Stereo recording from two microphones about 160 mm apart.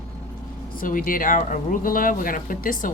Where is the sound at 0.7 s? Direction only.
60° left (ahead or behind).